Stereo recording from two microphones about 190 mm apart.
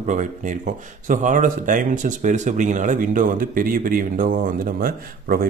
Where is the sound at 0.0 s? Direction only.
40° right (ahead or behind).